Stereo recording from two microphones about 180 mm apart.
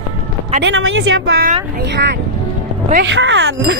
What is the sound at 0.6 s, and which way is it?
Speech, 75° right (ahead or behind).